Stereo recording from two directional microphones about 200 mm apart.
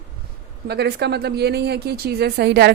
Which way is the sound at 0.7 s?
55° right (ahead or behind).